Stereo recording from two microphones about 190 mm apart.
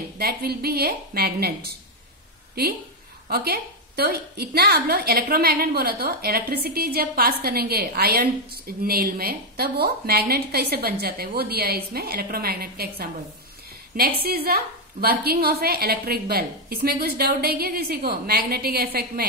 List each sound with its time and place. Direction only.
0.2 s a woman's voice: 55° right (ahead or behind)
3.3 s a woman's voice: 55° right (ahead or behind)
14.2 s a woman's voice: 55° right (ahead or behind)